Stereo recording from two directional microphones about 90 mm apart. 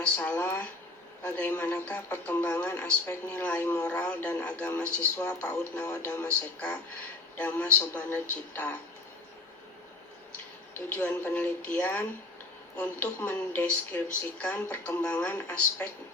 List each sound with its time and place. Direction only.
0.0 s speech: 20° left (ahead or behind)
7.3 s speech: 15° left (ahead or behind)
10.3 s speech: 20° left (ahead or behind)